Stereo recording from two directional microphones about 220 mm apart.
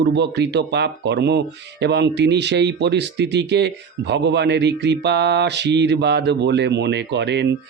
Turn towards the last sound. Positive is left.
turn(degrees=-50)  # may be behind; listen again after turning